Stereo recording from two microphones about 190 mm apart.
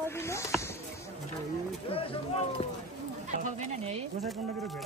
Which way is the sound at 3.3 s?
40° right (ahead or behind).